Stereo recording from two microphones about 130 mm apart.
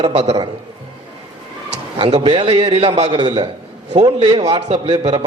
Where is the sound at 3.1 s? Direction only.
35° right (ahead or behind).